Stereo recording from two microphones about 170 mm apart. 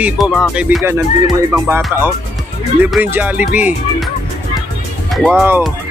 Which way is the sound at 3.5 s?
10° right (ahead or behind).